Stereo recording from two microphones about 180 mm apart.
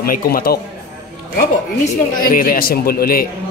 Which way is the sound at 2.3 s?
50° left (ahead or behind).